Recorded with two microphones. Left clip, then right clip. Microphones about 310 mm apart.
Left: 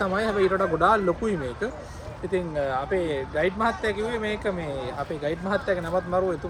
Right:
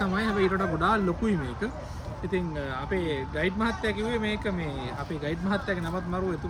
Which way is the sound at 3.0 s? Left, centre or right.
Left.